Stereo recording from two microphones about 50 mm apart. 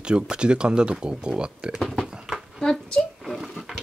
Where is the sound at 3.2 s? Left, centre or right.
Centre.